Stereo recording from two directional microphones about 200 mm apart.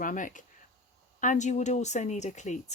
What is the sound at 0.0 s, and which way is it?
Speech, 40° left (ahead or behind).